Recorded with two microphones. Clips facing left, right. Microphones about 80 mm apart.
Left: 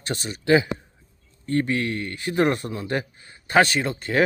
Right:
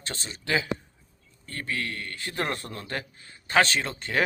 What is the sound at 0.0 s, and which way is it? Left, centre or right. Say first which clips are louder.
Speech: left 9 dB; centre.